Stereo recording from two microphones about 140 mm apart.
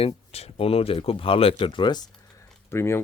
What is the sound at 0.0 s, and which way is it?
Speech, 45° left (ahead or behind).